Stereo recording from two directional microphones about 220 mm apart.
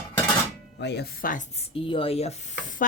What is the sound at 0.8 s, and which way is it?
Speech, 50° left (ahead or behind).